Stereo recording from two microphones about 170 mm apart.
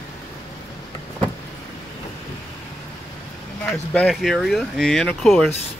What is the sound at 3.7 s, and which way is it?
Speech, centre (ahead or behind).